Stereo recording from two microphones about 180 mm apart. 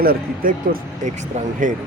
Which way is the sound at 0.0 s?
55° right (ahead or behind).